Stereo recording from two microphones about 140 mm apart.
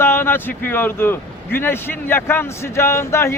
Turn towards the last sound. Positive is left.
turn(degrees=20)  # may be behind; listen again after turning